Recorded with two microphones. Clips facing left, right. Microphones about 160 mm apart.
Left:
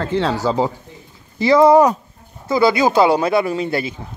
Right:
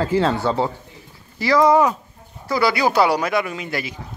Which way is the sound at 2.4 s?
20° left (ahead or behind).